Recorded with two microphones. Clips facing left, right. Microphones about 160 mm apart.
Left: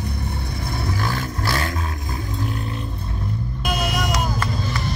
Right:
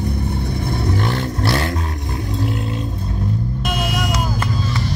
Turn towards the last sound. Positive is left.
turn(degrees=-5)  # may be behind; listen again after turning